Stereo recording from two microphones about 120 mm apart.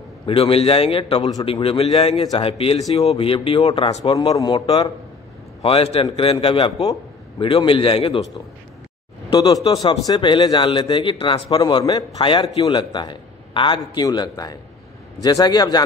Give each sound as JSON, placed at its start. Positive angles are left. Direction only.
{"t": 0.3, "sound": "a man's voice", "side_deg": 55}
{"t": 2.3, "sound": "a man's voice", "side_deg": 55}
{"t": 5.6, "sound": "a man's voice", "side_deg": 55}
{"t": 9.3, "sound": "a man's voice", "side_deg": 35}
{"t": 14.0, "sound": "a man's voice", "side_deg": 35}